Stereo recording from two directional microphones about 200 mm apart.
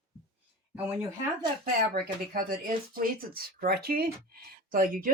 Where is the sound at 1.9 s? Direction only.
45° right (ahead or behind).